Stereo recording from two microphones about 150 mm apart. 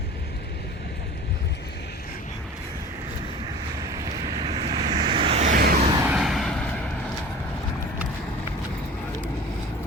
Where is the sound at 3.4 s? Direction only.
25° right (ahead or behind).